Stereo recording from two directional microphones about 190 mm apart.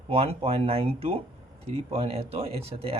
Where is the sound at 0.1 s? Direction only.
30° right (ahead or behind).